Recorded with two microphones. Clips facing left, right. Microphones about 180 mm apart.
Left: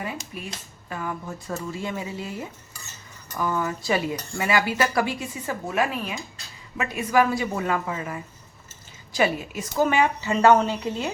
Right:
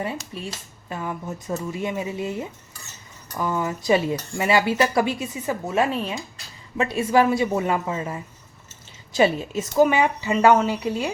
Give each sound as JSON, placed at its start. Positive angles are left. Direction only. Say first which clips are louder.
{"t": 0.3, "sound": "speech", "louder": "right 3 dB", "side_deg": -30}